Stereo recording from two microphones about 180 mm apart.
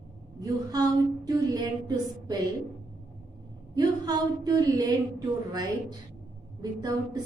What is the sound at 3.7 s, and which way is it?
A woman's voice, 20° right (ahead or behind).